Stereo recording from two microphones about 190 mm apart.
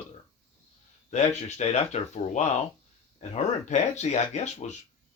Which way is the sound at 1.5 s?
35° left (ahead or behind).